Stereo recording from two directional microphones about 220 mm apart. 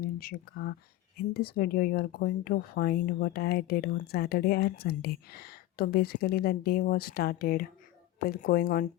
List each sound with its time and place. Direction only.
0.0 s speech: 40° left (ahead or behind)